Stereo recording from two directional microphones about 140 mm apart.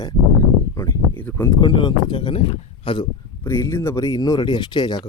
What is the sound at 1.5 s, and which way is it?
A man's voice, 35° left (ahead or behind).